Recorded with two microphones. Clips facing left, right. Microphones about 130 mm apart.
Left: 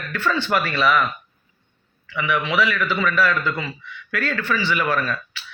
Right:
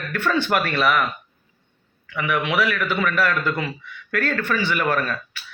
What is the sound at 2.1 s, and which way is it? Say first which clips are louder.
A man's voice: left 1 dB; 50° right (ahead or behind).